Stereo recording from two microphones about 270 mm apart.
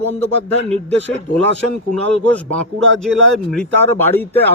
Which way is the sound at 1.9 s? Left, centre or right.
Centre.